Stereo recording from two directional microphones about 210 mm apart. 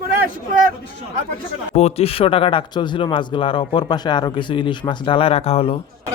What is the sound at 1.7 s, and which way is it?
Speech, 30° left (ahead or behind).